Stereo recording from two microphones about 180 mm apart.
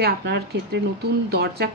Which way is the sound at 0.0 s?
70° right (ahead or behind).